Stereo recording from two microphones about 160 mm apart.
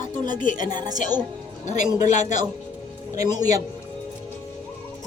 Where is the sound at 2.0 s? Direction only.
50° left (ahead or behind).